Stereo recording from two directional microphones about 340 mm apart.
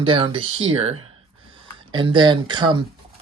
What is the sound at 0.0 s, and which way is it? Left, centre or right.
Speech, centre.